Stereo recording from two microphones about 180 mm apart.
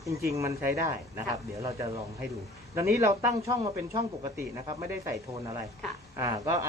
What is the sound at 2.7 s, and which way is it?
Speech, 15° right (ahead or behind).